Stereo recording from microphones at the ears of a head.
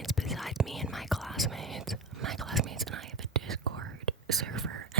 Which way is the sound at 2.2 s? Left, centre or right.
Right.